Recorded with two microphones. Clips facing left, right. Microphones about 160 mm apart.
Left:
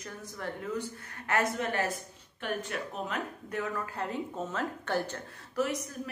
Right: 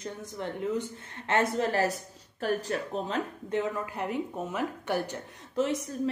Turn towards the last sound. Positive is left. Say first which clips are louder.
# right 3 dB
turn(degrees=-25)  # may be behind; listen again after turning